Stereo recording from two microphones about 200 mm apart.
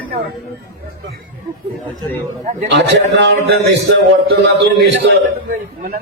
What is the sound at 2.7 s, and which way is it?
A man's voice, 60° right (ahead or behind).